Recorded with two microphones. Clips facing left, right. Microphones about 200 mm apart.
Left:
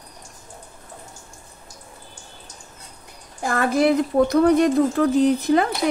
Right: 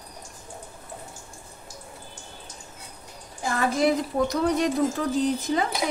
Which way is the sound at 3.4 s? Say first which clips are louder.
Left 4 dB; 60° left (ahead or behind).